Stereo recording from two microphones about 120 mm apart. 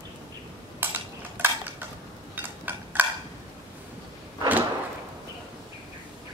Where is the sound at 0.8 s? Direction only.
15° right (ahead or behind).